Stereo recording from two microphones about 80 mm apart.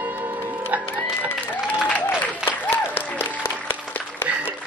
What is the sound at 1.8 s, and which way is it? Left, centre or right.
Applause, centre.